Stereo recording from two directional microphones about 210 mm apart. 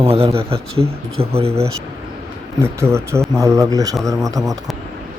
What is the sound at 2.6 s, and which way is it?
Speech, 10° right (ahead or behind).